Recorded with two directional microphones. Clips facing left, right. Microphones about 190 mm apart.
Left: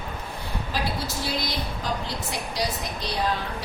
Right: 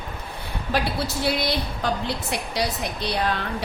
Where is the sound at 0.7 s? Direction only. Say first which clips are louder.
Right 5 dB; 70° right (ahead or behind).